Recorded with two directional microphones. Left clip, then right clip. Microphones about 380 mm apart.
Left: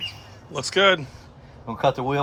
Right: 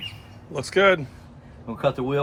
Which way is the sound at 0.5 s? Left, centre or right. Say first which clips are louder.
Even; centre.